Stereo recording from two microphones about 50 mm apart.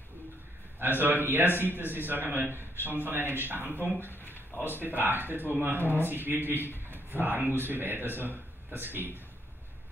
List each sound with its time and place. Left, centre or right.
0.7 s speech: right
4.1 s a sound: left
4.6 s speech: right